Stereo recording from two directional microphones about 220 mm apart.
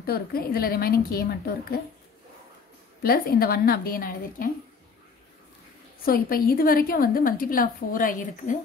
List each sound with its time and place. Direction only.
0.0 s a woman's voice: 45° left (ahead or behind)
3.0 s a woman's voice: 45° left (ahead or behind)
6.0 s a woman's voice: 40° left (ahead or behind)